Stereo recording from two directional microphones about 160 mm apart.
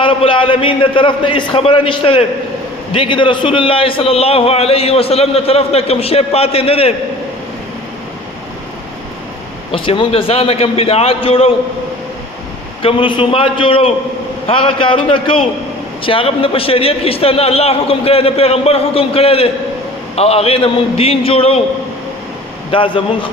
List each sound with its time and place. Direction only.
0.0 s a man's voice: 35° left (ahead or behind)
9.7 s a man's voice: 35° left (ahead or behind)
12.8 s a man's voice: 30° left (ahead or behind)
22.7 s a man's voice: 35° left (ahead or behind)